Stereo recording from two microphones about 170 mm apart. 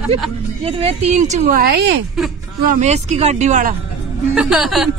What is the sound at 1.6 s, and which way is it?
Speech, 85° right.